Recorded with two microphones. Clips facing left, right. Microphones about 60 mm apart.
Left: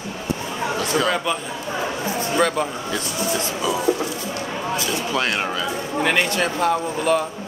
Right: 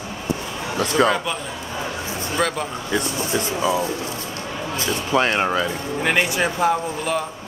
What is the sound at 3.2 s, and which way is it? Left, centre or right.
Speech, right.